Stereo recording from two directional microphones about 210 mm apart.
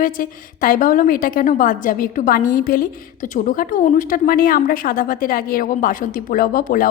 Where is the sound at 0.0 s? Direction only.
40° left (ahead or behind).